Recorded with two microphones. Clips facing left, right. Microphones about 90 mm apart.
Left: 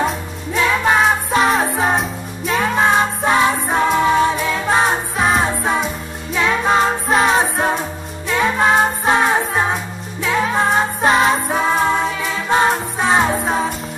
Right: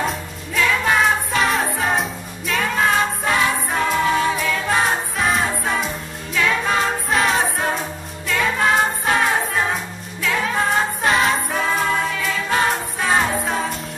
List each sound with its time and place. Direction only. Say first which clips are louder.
0.6 s music: left 3 dB; 25° left (ahead or behind)
2.6 s music: left 3 dB; 25° left (ahead or behind)
5.1 s music: left 4 dB; 40° left (ahead or behind)
5.4 s music: left 3 dB; 25° left (ahead or behind)
7.1 s music: left 3 dB; 40° left (ahead or behind)
8.3 s music: left 3 dB; 25° left (ahead or behind)